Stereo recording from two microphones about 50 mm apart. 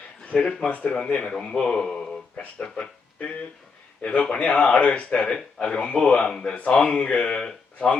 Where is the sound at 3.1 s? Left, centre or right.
Left.